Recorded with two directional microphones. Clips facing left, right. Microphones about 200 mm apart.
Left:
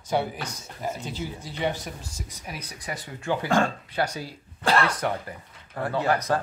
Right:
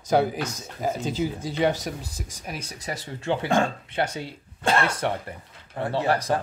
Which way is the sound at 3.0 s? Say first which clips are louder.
Right 1 dB; 25° right (ahead or behind).